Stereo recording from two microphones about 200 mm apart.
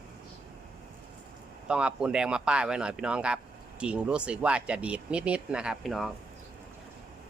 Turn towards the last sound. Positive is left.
turn(degrees=0)  # may be behind; listen again after turning